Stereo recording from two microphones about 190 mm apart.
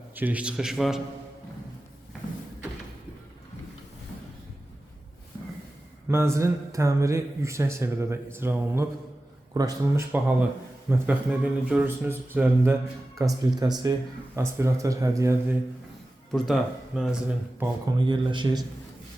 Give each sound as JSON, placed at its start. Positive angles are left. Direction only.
{"t": 0.2, "sound": "speech", "side_deg": -10}
{"t": 6.1, "sound": "speech", "side_deg": -15}
{"t": 16.3, "sound": "speech", "side_deg": 0}
{"t": 17.8, "sound": "speech", "side_deg": -25}